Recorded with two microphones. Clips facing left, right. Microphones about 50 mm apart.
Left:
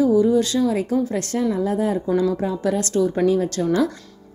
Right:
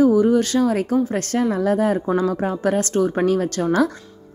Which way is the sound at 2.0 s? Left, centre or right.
Right.